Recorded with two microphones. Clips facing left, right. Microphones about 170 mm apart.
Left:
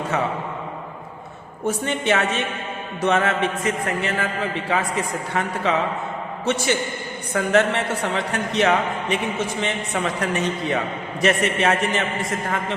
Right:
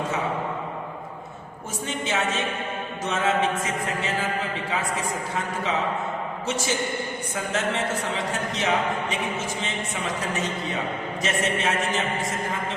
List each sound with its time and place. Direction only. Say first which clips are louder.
1.6 s a man's voice: left 8 dB; 65° left (ahead or behind)